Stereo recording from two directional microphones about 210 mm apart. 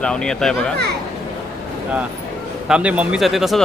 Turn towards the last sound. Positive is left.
turn(degrees=0)  # may be behind; listen again after turning